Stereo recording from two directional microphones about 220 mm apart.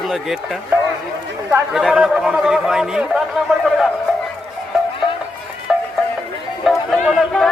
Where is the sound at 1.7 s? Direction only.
Centre (ahead or behind).